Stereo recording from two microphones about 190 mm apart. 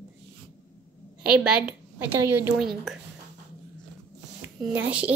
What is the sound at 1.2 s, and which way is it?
A woman's voice, 5° right (ahead or behind).